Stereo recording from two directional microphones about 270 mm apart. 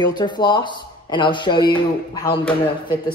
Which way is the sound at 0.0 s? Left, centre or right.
Centre.